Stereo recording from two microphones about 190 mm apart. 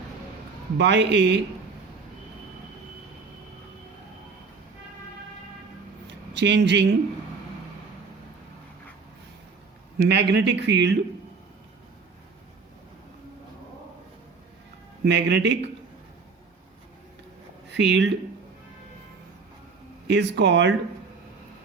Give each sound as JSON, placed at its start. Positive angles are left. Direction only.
{"t": 0.8, "sound": "speech", "side_deg": -65}
{"t": 6.1, "sound": "speech", "side_deg": -65}
{"t": 10.0, "sound": "speech", "side_deg": -65}
{"t": 15.0, "sound": "speech", "side_deg": -65}
{"t": 17.7, "sound": "speech", "side_deg": -65}
{"t": 20.1, "sound": "speech", "side_deg": -65}